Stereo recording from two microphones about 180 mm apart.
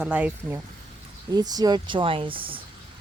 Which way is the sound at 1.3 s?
20° right (ahead or behind).